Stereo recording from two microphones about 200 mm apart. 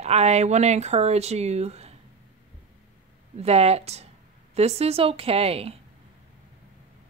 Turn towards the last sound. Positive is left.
turn(degrees=-30)  # may be behind; listen again after turning